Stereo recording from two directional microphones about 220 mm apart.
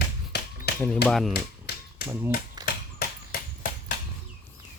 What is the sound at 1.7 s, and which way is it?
Tap, 45° left (ahead or behind).